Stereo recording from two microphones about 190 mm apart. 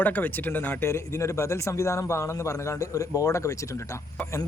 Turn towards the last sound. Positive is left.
turn(degrees=15)  # may be behind; listen again after turning